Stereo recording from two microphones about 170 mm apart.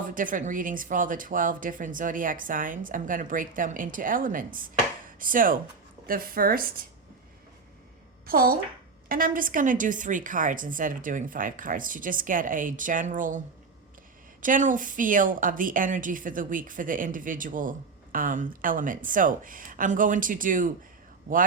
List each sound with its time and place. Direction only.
0.0 s a woman's voice: 50° right (ahead or behind)
5.0 s chopping: 55° right (ahead or behind)
6.1 s a woman's voice: 60° right (ahead or behind)
8.3 s a woman's voice: 60° right (ahead or behind)
14.4 s a woman's voice: 50° right (ahead or behind)